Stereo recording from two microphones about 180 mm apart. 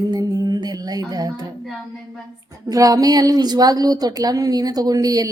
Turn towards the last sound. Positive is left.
turn(degrees=-20)  # may be behind; listen again after turning